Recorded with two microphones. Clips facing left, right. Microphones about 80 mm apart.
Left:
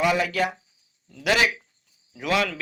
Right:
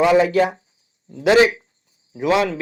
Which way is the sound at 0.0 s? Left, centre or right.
Right.